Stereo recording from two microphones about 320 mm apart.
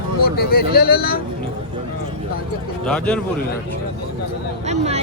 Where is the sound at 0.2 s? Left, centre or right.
Left.